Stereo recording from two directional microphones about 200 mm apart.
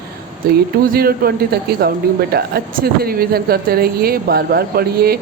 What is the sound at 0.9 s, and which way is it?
Speech, 50° right (ahead or behind).